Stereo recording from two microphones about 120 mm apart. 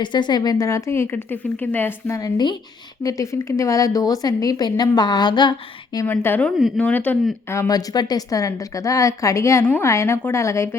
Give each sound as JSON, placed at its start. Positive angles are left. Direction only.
{"t": 0.0, "sound": "a woman's voice", "side_deg": 40}
{"t": 6.1, "sound": "speech", "side_deg": 15}
{"t": 7.7, "sound": "speech", "side_deg": 30}